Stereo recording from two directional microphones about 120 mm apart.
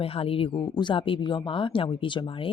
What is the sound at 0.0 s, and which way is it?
Speech, 55° left (ahead or behind).